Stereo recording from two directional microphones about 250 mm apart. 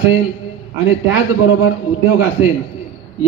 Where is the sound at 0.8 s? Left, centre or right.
Left.